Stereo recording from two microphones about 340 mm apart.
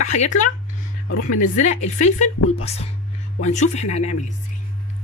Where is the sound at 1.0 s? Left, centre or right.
Left.